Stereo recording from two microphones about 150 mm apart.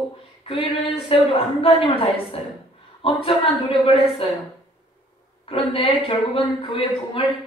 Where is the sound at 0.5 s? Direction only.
40° left (ahead or behind).